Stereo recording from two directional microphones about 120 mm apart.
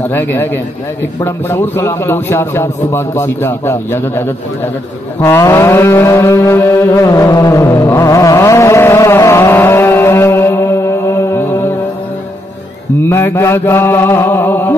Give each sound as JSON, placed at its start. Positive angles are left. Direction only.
{"t": 0.1, "sound": "a man's voice", "side_deg": 15}
{"t": 5.2, "sound": "music", "side_deg": 20}
{"t": 13.0, "sound": "a man's voice", "side_deg": 20}